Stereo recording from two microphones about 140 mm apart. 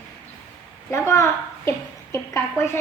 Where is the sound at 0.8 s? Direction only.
20° left (ahead or behind).